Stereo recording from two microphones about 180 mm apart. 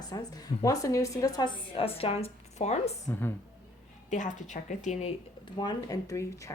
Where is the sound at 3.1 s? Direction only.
10° left (ahead or behind).